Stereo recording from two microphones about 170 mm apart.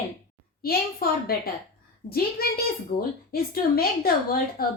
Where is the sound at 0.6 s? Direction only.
65° left (ahead or behind).